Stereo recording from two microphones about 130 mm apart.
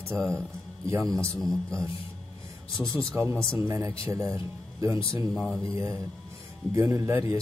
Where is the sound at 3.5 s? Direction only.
20° right (ahead or behind).